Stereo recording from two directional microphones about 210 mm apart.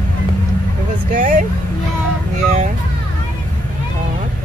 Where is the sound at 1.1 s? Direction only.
40° right (ahead or behind).